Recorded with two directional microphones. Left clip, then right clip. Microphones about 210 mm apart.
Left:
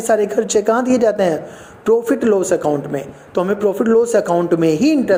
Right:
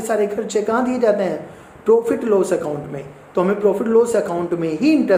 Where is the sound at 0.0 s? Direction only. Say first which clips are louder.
Left 4 dB; 35° left (ahead or behind).